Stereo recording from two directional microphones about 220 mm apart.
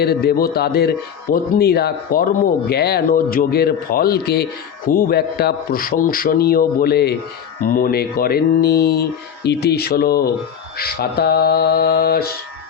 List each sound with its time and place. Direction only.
0.0 s a man's voice: 45° left (ahead or behind)